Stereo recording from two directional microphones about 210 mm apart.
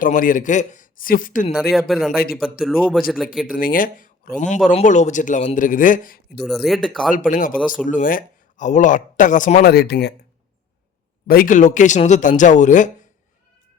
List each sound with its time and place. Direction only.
0.0 s speech: 40° left (ahead or behind)
1.7 s speech: centre (ahead or behind)
3.4 s speech: 40° left (ahead or behind)
6.4 s speech: centre (ahead or behind)
7.1 s speech: 40° left (ahead or behind)
11.3 s speech: 40° left (ahead or behind)